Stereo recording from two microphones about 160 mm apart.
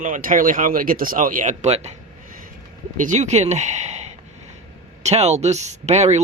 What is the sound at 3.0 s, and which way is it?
Speech, 50° right (ahead or behind).